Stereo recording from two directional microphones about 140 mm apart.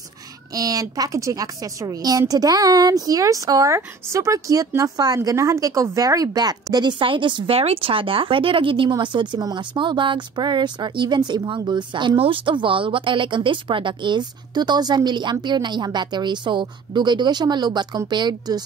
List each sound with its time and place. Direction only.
0.6 s a woman's voice: 25° right (ahead or behind)